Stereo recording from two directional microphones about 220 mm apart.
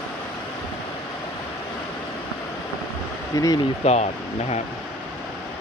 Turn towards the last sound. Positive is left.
turn(degrees=30)  # may be behind; listen again after turning